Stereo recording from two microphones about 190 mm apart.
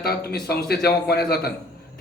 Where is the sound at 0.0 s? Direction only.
55° left (ahead or behind).